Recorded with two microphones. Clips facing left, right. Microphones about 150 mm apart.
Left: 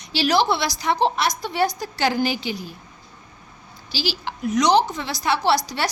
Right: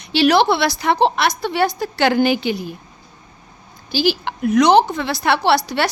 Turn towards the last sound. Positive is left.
turn(degrees=-65)  # may be behind; listen again after turning